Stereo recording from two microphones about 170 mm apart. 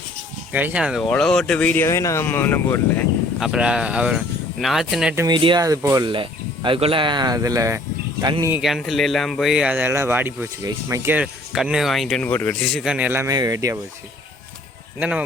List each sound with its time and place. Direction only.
0.5 s a man's voice: 10° right (ahead or behind); by 3.1 s 15° left (ahead or behind)
3.4 s speech: 5° right (ahead or behind)
5.1 s speech: 25° right (ahead or behind)
8.5 s speech: centre (ahead or behind)
12.6 s a man's voice: centre (ahead or behind); by 13.7 s 20° right (ahead or behind)
14.9 s speech: 10° right (ahead or behind)